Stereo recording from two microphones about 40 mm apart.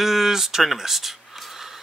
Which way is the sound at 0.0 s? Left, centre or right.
Centre.